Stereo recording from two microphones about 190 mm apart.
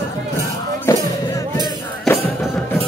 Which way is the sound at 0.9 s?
15° left (ahead or behind).